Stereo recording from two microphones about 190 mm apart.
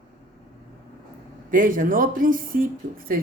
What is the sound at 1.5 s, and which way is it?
A woman's voice, 45° right (ahead or behind).